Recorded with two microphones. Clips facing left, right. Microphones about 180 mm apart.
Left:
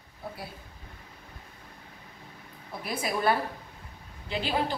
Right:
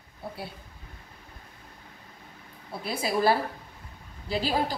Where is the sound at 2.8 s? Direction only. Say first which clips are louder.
Right 3 dB; 30° right (ahead or behind).